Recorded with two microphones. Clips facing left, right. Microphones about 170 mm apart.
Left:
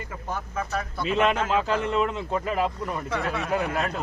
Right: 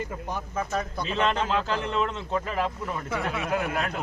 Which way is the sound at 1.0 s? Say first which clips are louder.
Left 4 dB; 10° left (ahead or behind).